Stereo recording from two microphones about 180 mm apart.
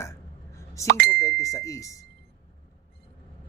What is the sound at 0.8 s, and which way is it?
Speech, 65° right (ahead or behind).